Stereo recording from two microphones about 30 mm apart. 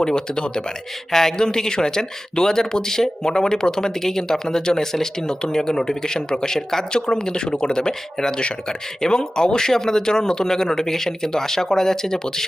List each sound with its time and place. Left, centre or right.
0.0 s speech: left